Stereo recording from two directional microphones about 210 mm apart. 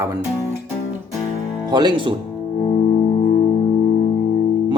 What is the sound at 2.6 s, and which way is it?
Music, 30° left (ahead or behind).